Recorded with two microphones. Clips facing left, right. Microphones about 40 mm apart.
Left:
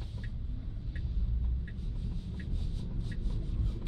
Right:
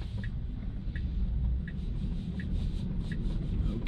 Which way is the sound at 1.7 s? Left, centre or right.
Right.